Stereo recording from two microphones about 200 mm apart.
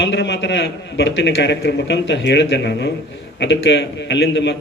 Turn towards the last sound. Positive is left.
turn(degrees=60)  # may be behind; listen again after turning